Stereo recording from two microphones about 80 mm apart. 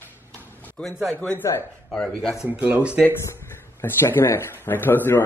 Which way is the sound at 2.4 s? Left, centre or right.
Centre.